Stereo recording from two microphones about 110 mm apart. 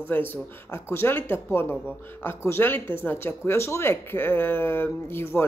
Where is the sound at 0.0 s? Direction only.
20° left (ahead or behind).